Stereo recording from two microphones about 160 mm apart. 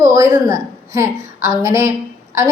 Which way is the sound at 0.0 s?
20° right (ahead or behind).